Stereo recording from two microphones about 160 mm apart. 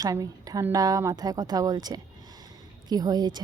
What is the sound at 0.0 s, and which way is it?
A woman's voice, 20° right (ahead or behind).